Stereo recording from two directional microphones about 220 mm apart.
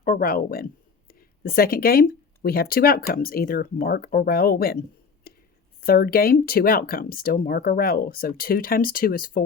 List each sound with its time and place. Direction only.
0.0 s speech: 40° left (ahead or behind)
5.3 s a sound: 45° left (ahead or behind)
5.8 s speech: 45° left (ahead or behind)